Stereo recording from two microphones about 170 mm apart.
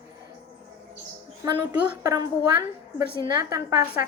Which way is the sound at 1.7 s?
20° right (ahead or behind).